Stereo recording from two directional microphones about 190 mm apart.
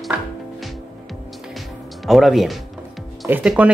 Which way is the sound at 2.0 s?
Centre (ahead or behind).